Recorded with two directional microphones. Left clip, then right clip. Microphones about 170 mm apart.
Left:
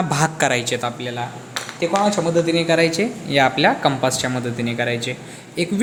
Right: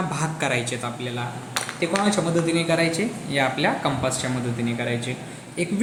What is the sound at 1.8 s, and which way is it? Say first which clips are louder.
A woman's voice: left 5 dB; 35° left (ahead or behind).